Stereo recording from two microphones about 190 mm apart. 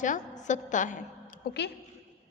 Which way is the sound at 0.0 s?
40° left (ahead or behind).